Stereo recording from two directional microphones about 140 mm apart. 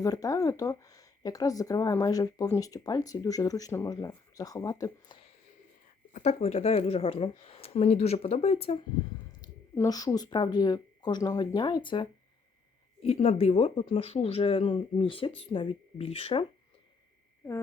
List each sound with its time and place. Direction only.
0.0 s speech: 25° left (ahead or behind)
6.1 s speech: 50° left (ahead or behind)
9.4 s speech: 25° left (ahead or behind)
13.0 s speech: 45° left (ahead or behind)